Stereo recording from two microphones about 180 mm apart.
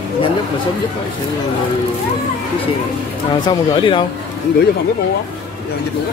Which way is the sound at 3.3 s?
25° left (ahead or behind).